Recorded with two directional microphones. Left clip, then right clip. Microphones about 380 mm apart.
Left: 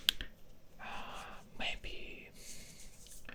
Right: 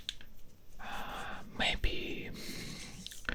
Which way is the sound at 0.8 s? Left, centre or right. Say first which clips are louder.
Right 4 dB; centre.